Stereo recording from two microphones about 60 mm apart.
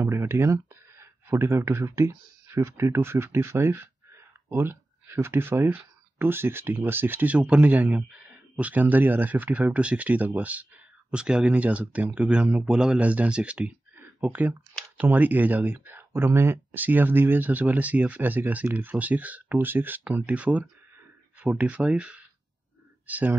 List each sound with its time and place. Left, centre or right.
0.0 s speech: right
3.7 s a sound: right
6.1 s a man's voice: right; by 13.0 s centre
13.0 s speech: right
16.7 s speech: right
20.2 s speech: right